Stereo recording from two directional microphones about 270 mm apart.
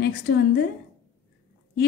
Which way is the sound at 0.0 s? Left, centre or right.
Left.